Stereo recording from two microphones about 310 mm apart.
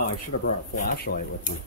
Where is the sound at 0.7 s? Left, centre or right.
Left.